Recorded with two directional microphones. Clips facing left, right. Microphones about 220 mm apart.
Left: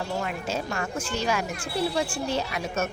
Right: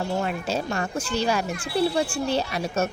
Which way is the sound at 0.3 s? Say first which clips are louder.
Right 3 dB; 35° right (ahead or behind).